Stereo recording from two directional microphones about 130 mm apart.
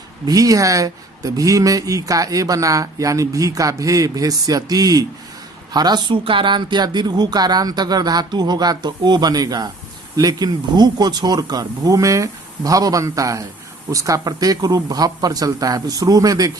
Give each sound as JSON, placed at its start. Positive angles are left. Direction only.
{"t": 0.3, "sound": "speech", "side_deg": -25}